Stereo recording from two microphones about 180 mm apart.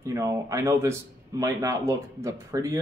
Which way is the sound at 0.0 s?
15° right (ahead or behind).